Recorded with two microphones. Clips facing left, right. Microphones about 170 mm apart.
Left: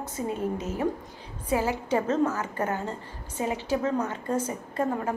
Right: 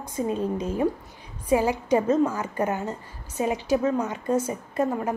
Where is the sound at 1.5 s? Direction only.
15° right (ahead or behind).